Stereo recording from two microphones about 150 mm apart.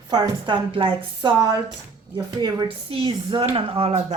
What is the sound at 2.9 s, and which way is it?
Speech, 40° right (ahead or behind).